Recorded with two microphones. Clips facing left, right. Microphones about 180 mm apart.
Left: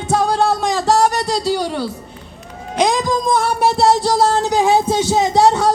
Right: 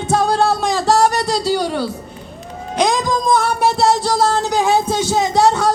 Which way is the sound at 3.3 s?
30° left (ahead or behind).